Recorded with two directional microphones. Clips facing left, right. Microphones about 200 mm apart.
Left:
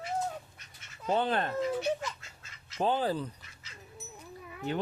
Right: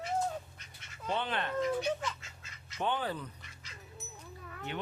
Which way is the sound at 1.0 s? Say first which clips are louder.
Left 6 dB; 40° left (ahead or behind).